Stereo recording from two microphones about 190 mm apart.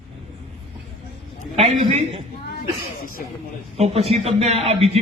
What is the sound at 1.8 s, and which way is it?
Speech, 30° right (ahead or behind).